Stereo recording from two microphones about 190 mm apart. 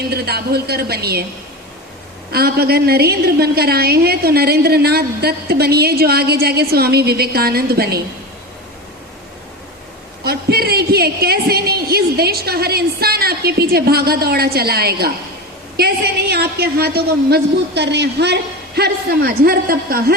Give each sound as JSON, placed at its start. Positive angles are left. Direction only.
{"t": 0.1, "sound": "a woman's voice", "side_deg": -55}
{"t": 2.3, "sound": "a woman's voice", "side_deg": -55}
{"t": 10.2, "sound": "a woman's voice", "side_deg": -55}
{"t": 16.3, "sound": "a woman's voice", "side_deg": -55}